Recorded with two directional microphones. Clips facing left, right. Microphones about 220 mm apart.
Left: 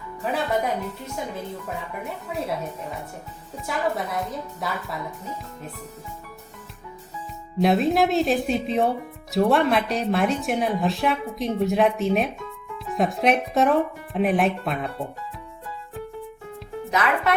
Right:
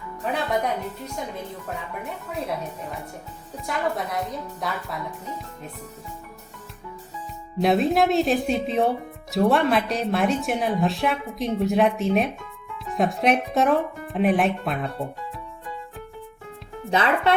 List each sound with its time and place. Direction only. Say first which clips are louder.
0.2 s speech: left 1 dB; centre (ahead or behind)
3.7 s speech: left 1 dB; centre (ahead or behind)
7.6 s speech: even; centre (ahead or behind)
16.9 s speech: right 2 dB; 30° right (ahead or behind)